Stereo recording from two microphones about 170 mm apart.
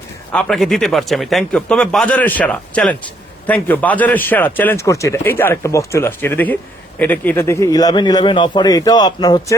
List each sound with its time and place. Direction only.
0.3 s a man's voice: centre (ahead or behind); by 9.6 s 25° left (ahead or behind)